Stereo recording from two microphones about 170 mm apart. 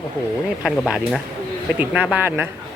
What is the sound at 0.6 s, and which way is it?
Speech, centre (ahead or behind).